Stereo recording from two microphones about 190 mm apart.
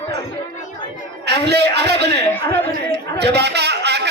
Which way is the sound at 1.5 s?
60° right (ahead or behind).